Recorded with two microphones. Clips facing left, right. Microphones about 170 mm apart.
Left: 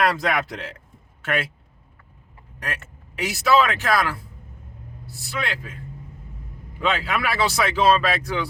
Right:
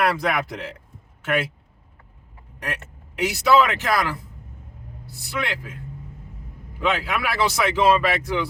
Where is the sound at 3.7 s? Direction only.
20° right (ahead or behind).